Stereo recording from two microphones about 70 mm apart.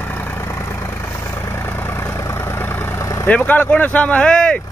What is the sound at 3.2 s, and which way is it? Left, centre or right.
Speech, left.